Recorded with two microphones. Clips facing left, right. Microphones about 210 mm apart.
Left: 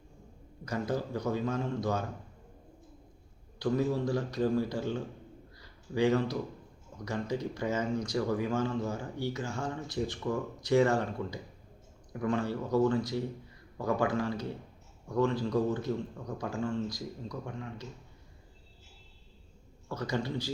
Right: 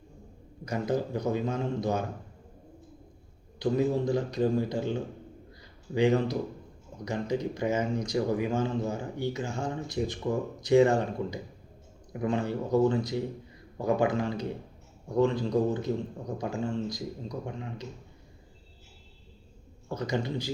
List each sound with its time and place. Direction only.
0.6 s speech: 15° right (ahead or behind)
3.6 s a man's voice: 20° right (ahead or behind)
19.9 s speech: 15° right (ahead or behind)